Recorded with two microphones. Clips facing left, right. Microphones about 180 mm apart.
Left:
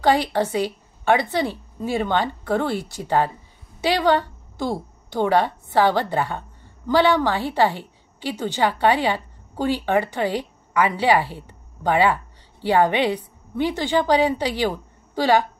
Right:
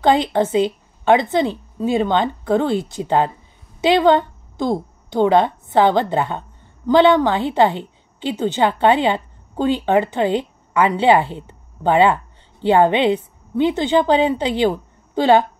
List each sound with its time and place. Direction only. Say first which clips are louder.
0.0 s a woman's voice: right 3 dB; 20° right (ahead or behind)